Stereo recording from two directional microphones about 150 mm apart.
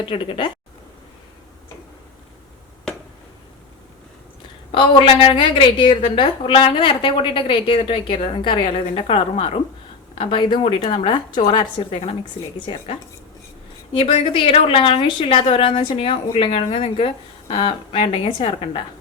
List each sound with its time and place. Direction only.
0.0 s a woman's voice: 35° left (ahead or behind)
4.7 s a woman's voice: 35° left (ahead or behind)
13.9 s a woman's voice: 40° left (ahead or behind)